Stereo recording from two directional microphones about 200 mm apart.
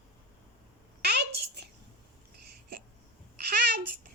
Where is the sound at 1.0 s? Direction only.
55° right (ahead or behind).